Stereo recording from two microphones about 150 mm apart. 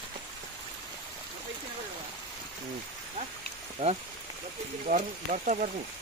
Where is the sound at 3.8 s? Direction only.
45° right (ahead or behind).